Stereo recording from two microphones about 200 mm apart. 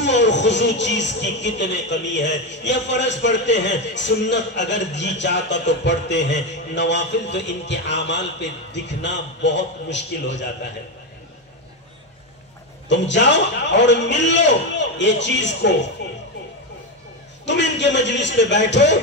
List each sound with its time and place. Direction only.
0.0 s speech: 60° left (ahead or behind)
12.8 s speech: 60° left (ahead or behind)
17.5 s speech: 60° left (ahead or behind)